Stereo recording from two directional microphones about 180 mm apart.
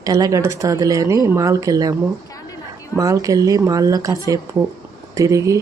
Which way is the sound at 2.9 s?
20° right (ahead or behind).